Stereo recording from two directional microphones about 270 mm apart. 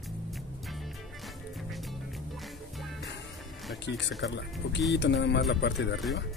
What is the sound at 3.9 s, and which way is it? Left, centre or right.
Speech, left.